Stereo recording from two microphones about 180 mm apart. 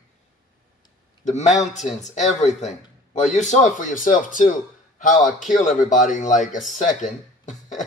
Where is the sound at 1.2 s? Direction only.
40° left (ahead or behind).